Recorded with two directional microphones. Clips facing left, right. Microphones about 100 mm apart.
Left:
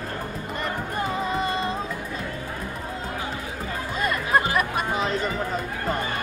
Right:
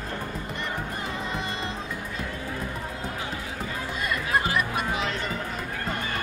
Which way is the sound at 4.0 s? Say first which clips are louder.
Left 4 dB; 40° left (ahead or behind).